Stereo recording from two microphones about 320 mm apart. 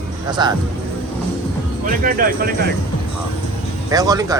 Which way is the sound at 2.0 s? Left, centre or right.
Right.